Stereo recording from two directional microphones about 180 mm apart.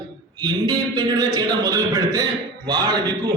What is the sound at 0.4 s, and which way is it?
A man's voice, 20° right (ahead or behind).